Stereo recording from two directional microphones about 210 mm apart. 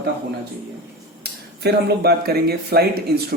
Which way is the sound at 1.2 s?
50° right (ahead or behind).